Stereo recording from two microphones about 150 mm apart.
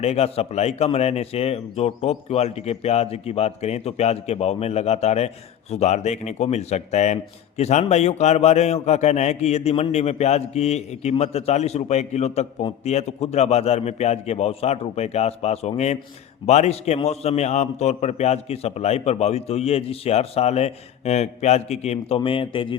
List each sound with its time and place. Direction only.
0.0 s a man's voice: 45° left (ahead or behind)